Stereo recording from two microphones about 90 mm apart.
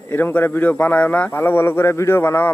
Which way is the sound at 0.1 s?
25° left (ahead or behind).